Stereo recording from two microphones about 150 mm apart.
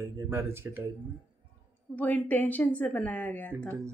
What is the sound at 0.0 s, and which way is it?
Speech, 15° right (ahead or behind).